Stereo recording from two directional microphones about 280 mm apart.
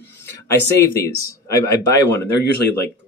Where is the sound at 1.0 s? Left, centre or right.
Centre.